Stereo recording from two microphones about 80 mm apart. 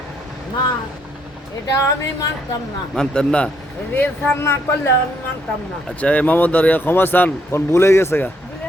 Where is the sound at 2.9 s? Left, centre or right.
Centre.